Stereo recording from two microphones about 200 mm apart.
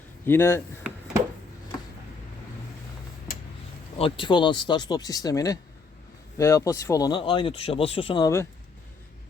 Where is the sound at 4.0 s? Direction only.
25° left (ahead or behind).